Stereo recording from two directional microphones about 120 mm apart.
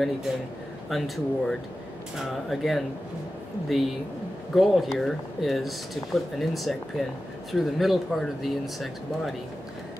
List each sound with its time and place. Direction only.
0.8 s speech: centre (ahead or behind)